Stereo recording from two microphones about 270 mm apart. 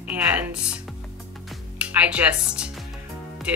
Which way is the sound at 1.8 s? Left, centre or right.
Centre.